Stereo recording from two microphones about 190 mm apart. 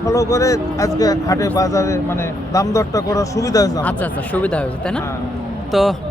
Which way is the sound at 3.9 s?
10° left (ahead or behind).